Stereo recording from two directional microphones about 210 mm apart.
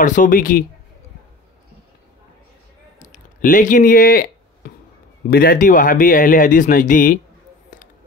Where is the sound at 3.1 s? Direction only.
35° left (ahead or behind).